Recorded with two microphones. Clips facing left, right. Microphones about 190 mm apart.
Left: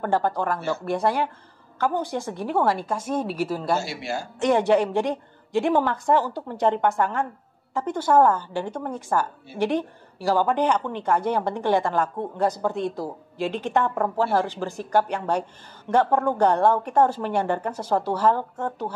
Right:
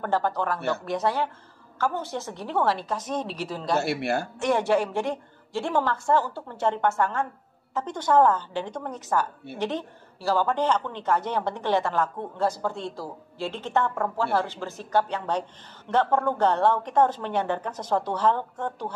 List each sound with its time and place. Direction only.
0.0 s speech: 15° left (ahead or behind)
0.6 s speech: 60° right (ahead or behind)
0.8 s speech: 10° left (ahead or behind)
3.7 s speech: 60° right (ahead or behind)
4.4 s speech: 15° left (ahead or behind)